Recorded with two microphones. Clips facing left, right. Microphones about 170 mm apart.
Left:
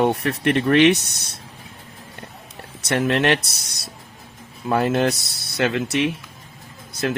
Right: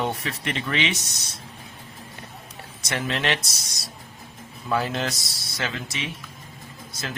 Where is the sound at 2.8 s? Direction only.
60° left (ahead or behind).